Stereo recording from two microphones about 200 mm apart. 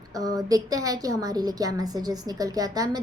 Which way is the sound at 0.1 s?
20° right (ahead or behind).